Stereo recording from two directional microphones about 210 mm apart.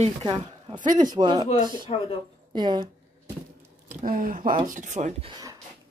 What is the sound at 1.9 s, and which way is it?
Speech, 30° left (ahead or behind).